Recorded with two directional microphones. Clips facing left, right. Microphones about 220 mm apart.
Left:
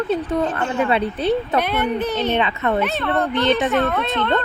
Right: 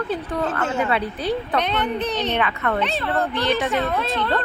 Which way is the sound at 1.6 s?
5° left (ahead or behind).